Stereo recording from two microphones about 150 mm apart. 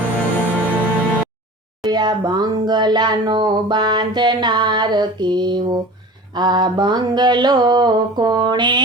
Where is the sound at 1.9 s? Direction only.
30° right (ahead or behind).